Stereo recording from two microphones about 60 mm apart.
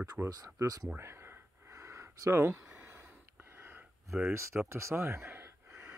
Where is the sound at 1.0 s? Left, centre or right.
Right.